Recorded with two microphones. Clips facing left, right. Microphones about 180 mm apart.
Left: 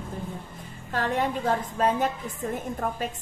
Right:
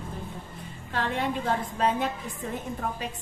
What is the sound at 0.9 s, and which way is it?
A woman's voice, 45° left (ahead or behind).